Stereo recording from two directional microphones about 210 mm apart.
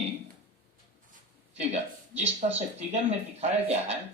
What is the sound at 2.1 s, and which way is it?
Speech, 30° right (ahead or behind).